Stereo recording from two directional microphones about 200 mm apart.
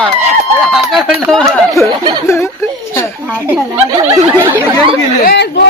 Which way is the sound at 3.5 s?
10° right (ahead or behind).